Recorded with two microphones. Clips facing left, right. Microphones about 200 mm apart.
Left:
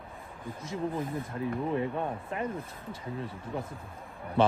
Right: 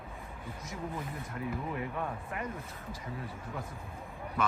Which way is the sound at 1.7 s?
25° left (ahead or behind).